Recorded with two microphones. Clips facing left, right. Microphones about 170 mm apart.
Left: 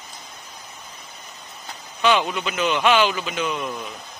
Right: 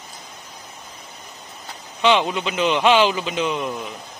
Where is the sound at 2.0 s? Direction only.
20° right (ahead or behind).